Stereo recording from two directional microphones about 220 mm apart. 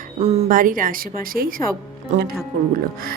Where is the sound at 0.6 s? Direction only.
40° right (ahead or behind).